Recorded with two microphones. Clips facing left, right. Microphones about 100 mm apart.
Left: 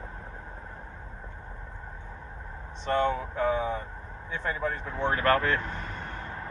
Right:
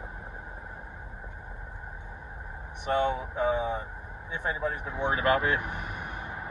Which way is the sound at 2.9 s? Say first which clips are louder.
Left 1 dB; 15° right (ahead or behind).